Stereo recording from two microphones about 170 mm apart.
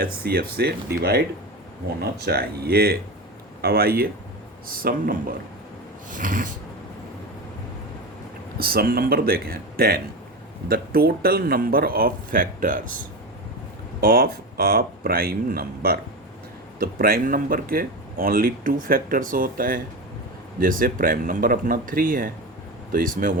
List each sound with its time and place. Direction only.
0.0 s speech: 65° right (ahead or behind)
6.1 s snort: 50° right (ahead or behind)
8.5 s speech: 60° right (ahead or behind)
14.0 s speech: 60° right (ahead or behind)